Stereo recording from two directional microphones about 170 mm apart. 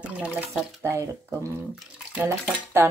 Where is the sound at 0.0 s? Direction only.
5° right (ahead or behind).